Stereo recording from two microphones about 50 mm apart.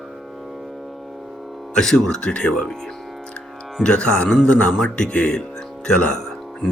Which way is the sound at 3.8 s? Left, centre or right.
Left.